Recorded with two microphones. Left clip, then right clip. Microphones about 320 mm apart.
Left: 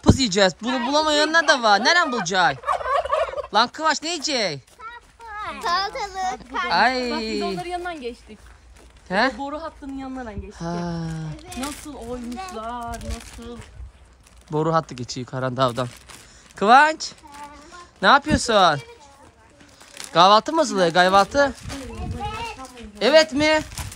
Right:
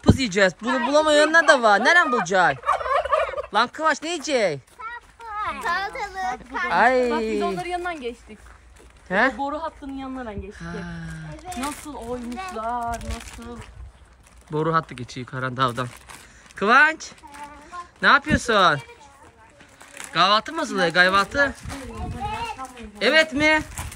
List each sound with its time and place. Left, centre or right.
0.1 s speech: centre
2.7 s fowl: left
3.5 s speech: centre
9.4 s speech: centre
10.6 s speech: centre
11.0 s speech: centre
12.5 s speech: centre
12.9 s speech: centre
14.5 s speech: centre
19.9 s speech: centre